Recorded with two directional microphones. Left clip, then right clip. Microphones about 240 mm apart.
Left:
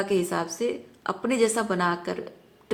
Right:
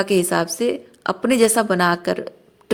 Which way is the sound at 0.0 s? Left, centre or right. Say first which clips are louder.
Right 7 dB; right.